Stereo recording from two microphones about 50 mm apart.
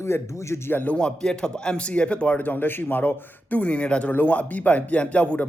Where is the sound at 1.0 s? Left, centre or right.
Centre.